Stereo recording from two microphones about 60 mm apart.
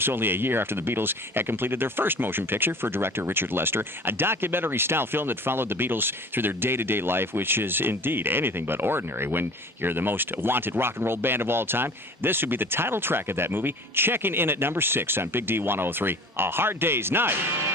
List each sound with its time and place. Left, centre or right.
0.0 s speech: right